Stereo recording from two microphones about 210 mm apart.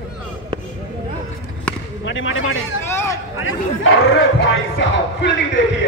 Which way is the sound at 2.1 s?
70° left (ahead or behind).